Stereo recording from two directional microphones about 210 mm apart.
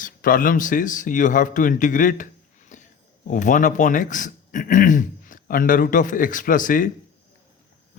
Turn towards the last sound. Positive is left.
turn(degrees=40)  # may be behind; listen again after turning